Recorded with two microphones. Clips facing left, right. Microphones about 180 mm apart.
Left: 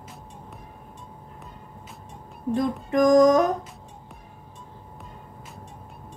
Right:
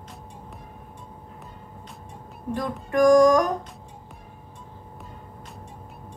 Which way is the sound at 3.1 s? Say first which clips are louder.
Even; 25° left (ahead or behind).